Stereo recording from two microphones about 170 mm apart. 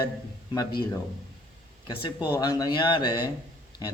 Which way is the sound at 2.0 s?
25° left (ahead or behind).